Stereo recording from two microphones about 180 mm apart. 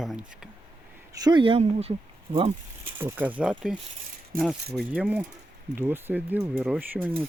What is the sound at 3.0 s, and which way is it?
Speech, 10° right (ahead or behind).